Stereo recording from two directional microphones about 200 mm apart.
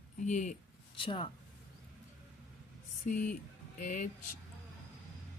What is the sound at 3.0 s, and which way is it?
Speech, 40° left (ahead or behind).